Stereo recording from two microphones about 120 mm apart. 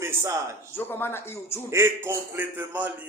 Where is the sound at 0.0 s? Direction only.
20° right (ahead or behind).